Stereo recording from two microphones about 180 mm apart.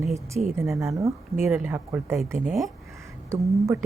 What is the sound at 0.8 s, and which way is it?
Speech, 15° right (ahead or behind).